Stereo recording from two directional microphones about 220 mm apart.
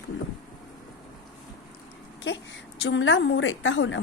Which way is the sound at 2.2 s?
55° left (ahead or behind).